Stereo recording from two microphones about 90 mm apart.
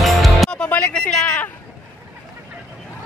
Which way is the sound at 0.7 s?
15° left (ahead or behind).